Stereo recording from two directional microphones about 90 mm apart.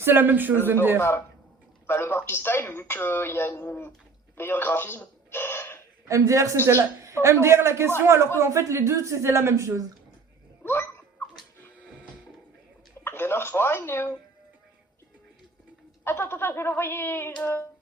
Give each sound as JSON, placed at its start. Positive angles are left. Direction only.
{"t": 0.0, "sound": "speech", "side_deg": -25}
{"t": 0.9, "sound": "speech", "side_deg": 25}
{"t": 4.4, "sound": "telephone", "side_deg": 25}
{"t": 6.1, "sound": "a man's voice", "side_deg": -35}
{"t": 10.6, "sound": "dog", "side_deg": 25}
{"t": 11.6, "sound": "printer", "side_deg": 15}
{"t": 13.1, "sound": "speech", "side_deg": 25}
{"t": 16.0, "sound": "speech", "side_deg": 25}